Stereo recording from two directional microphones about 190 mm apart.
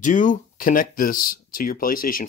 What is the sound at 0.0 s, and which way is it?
Speech, 40° left (ahead or behind).